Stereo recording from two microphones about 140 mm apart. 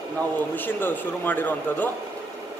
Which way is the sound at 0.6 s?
15° left (ahead or behind).